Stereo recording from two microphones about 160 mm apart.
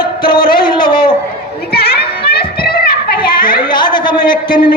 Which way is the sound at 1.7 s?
80° left.